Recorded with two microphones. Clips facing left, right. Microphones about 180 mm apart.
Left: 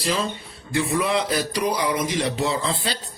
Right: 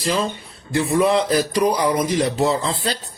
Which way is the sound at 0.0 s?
40° right (ahead or behind).